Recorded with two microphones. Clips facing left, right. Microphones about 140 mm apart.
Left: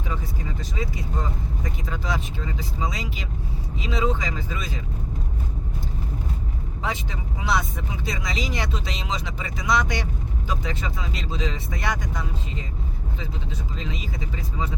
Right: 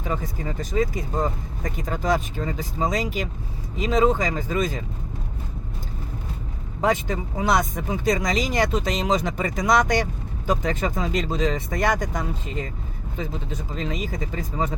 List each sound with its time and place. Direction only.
0.1 s speech: 50° right (ahead or behind)
6.8 s speech: 45° right (ahead or behind)